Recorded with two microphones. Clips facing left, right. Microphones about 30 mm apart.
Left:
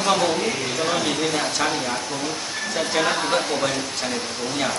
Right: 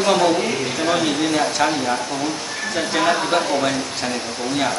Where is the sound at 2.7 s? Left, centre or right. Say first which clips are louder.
Right 3 dB; centre.